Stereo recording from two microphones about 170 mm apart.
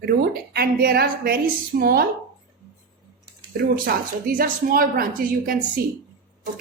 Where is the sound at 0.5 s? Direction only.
65° right (ahead or behind).